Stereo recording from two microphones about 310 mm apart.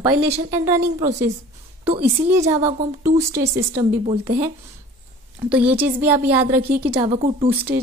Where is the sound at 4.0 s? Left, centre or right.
Right.